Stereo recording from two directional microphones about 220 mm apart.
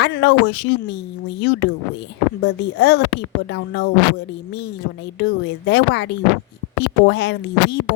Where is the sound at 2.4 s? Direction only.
50° left (ahead or behind).